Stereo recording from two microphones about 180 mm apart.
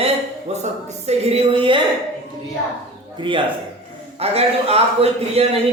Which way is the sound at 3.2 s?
25° right (ahead or behind).